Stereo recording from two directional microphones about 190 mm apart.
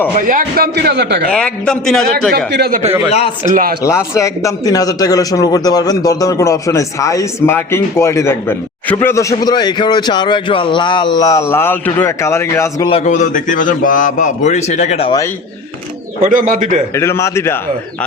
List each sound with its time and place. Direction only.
0.2 s a man's voice: 45° right (ahead or behind)
1.3 s a man's voice: 5° left (ahead or behind)
2.5 s a man's voice: 55° right (ahead or behind)
3.8 s a man's voice: 15° left (ahead or behind)
9.4 s speech: 20° left (ahead or behind)
12.9 s a man's voice: 40° left (ahead or behind)
16.2 s speech: 40° right (ahead or behind)
16.9 s a man's voice: 15° left (ahead or behind)